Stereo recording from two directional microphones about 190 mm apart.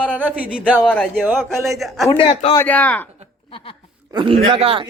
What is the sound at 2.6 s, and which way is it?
Speech, 10° left (ahead or behind).